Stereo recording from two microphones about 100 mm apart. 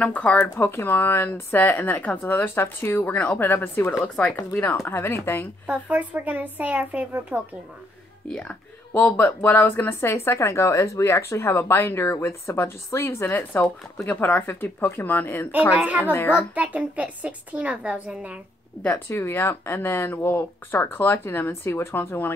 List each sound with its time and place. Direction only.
0.0 s speech: 15° left (ahead or behind)
0.6 s speech: 25° left (ahead or behind)
5.7 s a woman's voice: 15° right (ahead or behind)
8.3 s speech: 10° left (ahead or behind)
15.7 s a woman's voice: 15° right (ahead or behind)
16.1 s speech: 20° left (ahead or behind)
16.5 s a woman's voice: 15° right (ahead or behind)
18.8 s speech: 15° left (ahead or behind)
19.0 s speech: 25° left (ahead or behind)